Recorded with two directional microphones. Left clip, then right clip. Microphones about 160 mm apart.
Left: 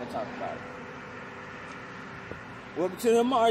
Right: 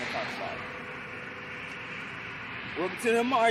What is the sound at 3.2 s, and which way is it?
Speech, 5° left (ahead or behind).